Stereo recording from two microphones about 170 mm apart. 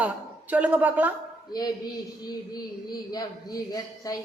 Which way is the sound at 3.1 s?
20° left (ahead or behind).